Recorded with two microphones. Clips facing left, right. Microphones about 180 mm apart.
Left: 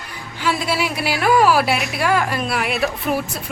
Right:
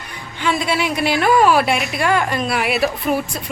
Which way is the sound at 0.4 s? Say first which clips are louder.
Right 2 dB; 5° left (ahead or behind).